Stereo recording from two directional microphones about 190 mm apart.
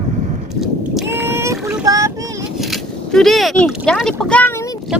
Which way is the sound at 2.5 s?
Centre (ahead or behind).